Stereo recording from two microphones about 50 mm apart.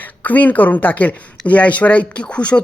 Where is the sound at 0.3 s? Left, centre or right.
Left.